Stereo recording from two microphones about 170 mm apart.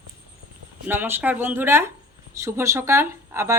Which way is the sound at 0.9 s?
10° right (ahead or behind).